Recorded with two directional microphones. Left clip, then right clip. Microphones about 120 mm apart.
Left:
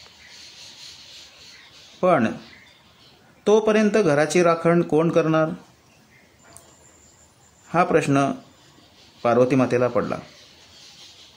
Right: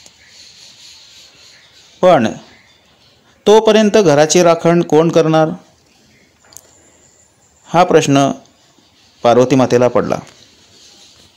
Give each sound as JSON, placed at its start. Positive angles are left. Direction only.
{"t": 2.0, "sound": "speech", "side_deg": -50}
{"t": 3.4, "sound": "speech", "side_deg": -50}
{"t": 7.6, "sound": "speech", "side_deg": -55}